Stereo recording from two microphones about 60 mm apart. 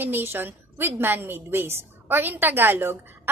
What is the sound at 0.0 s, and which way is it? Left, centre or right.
A woman's voice, right.